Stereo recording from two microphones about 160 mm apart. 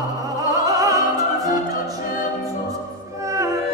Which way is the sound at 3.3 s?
20° right (ahead or behind).